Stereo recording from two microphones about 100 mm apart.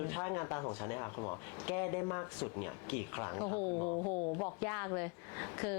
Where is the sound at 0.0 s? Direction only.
20° left (ahead or behind).